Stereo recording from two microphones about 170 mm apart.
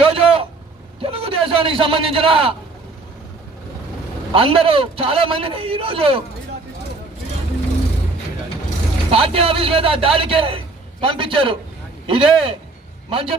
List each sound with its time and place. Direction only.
0.0 s a sound: 35° right (ahead or behind)
2.1 s a man's voice: 30° right (ahead or behind)
4.3 s a man's voice: 30° right (ahead or behind)
9.1 s a man's voice: 35° right (ahead or behind)